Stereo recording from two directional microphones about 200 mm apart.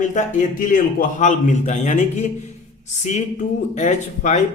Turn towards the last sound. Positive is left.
turn(degrees=35)  # may be behind; listen again after turning